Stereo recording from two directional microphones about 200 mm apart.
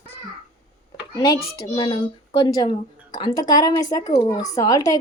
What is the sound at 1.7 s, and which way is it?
Speech, 20° left (ahead or behind).